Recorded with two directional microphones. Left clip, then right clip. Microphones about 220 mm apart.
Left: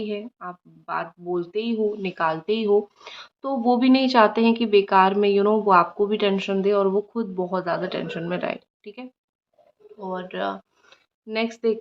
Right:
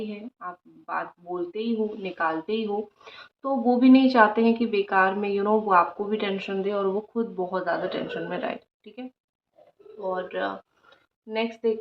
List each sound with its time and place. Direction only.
0.1 s speech: 45° left (ahead or behind)
10.1 s speech: 40° left (ahead or behind)